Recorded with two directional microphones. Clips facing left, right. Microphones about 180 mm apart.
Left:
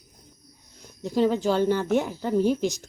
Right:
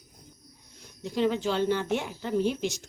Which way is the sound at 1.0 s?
40° left (ahead or behind).